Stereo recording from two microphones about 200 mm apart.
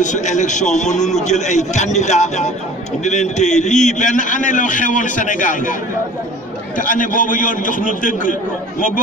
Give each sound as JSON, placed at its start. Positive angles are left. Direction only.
{"t": 0.0, "sound": "a man's voice", "side_deg": 35}
{"t": 6.8, "sound": "a man's voice", "side_deg": 40}